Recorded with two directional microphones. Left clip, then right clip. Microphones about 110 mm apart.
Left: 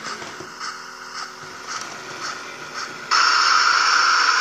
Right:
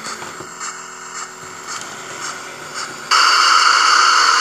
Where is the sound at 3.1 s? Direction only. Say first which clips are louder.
Right 5 dB; 45° right (ahead or behind).